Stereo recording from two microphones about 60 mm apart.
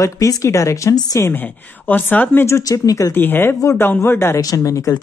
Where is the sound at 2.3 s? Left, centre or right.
Left.